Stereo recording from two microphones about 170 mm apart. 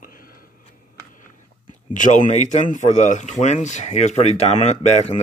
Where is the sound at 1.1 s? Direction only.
50° left (ahead or behind).